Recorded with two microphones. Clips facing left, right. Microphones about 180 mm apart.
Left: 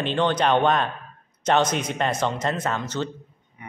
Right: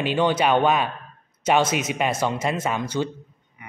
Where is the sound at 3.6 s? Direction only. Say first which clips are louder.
Left 3 dB; 30° left (ahead or behind).